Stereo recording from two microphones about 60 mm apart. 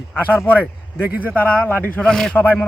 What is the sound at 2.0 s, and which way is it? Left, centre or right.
Speech, centre.